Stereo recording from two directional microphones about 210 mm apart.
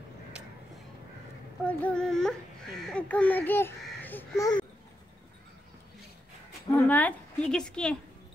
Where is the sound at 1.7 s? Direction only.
5° left (ahead or behind).